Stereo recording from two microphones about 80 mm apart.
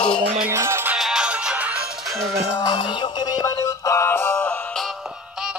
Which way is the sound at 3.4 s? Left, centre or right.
Left.